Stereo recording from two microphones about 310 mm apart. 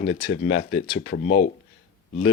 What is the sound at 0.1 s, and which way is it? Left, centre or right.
Speech, left.